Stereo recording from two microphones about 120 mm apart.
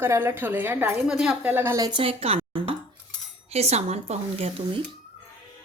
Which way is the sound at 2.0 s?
55° right (ahead or behind).